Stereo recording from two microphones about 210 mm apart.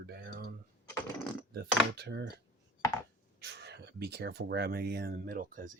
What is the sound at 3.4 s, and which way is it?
Speech, 50° right (ahead or behind).